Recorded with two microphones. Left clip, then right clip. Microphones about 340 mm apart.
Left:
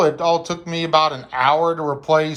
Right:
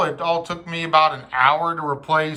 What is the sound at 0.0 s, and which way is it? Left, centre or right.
Speech, centre.